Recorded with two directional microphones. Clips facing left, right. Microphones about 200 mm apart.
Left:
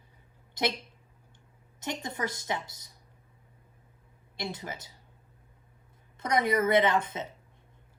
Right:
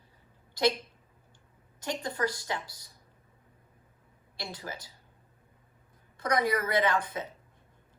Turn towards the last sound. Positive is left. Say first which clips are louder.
# left 3 dB
turn(degrees=25)  # may be behind; listen again after turning